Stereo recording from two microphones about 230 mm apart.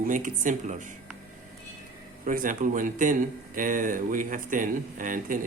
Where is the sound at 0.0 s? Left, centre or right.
Right.